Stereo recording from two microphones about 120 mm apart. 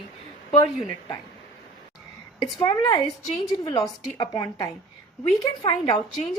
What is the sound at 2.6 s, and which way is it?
A woman's voice, 35° left (ahead or behind).